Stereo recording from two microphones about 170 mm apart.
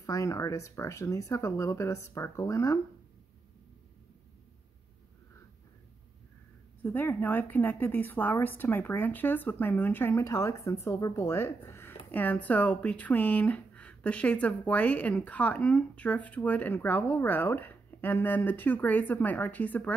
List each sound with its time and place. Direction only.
0.0 s a woman's voice: 20° left (ahead or behind)
6.8 s a woman's voice: 10° left (ahead or behind)